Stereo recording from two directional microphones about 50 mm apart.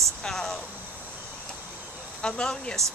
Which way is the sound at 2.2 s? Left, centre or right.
Centre.